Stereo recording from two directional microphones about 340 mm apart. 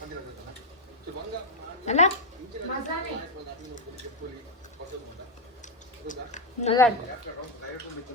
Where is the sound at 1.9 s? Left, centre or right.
Centre.